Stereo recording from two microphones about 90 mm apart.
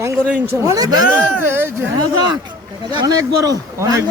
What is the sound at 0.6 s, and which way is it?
Speech, 40° right (ahead or behind).